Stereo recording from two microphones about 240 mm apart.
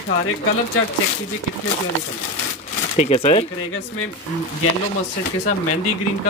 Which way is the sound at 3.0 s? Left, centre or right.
Left.